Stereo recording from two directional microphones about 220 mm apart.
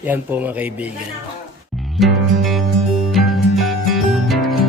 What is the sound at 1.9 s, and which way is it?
Music, centre (ahead or behind).